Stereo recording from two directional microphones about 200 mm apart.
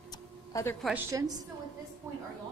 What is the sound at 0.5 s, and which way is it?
Speech, 15° left (ahead or behind).